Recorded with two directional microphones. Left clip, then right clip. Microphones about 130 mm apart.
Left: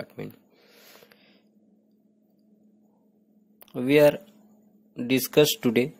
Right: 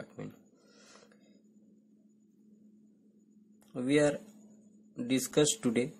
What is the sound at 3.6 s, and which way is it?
Speech, 30° left (ahead or behind).